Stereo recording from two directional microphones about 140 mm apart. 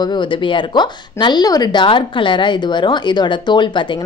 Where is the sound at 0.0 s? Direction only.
35° left (ahead or behind).